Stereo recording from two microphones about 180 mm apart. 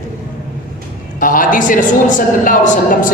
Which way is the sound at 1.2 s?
50° left (ahead or behind).